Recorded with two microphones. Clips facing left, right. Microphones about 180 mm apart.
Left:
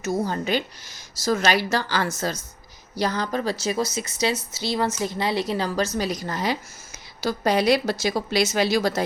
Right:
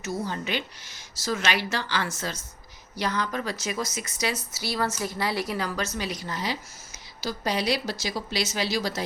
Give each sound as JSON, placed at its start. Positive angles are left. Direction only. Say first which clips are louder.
{"t": 0.0, "sound": "a woman's voice", "louder": "left 6 dB", "side_deg": 45}